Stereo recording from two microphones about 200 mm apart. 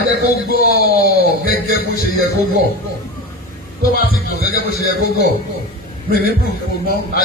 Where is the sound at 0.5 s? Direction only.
50° left (ahead or behind).